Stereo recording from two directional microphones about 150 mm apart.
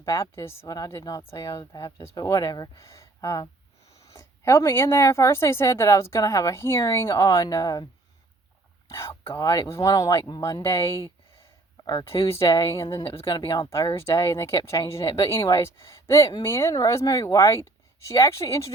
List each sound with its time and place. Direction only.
0.0 s a woman's voice: 20° left (ahead or behind)
8.9 s a woman's voice: 20° left (ahead or behind)
13.0 s a woman's voice: 35° left (ahead or behind); by 18.7 s 20° left (ahead or behind)